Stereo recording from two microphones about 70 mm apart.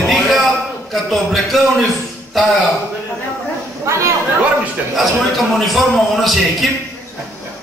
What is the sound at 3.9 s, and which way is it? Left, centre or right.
Chatter, right.